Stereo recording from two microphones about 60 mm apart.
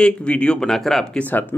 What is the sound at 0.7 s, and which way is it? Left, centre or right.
Speech, centre.